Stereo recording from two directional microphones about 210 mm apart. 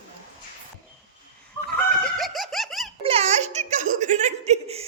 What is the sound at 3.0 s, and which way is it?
Giggle, 30° right (ahead or behind).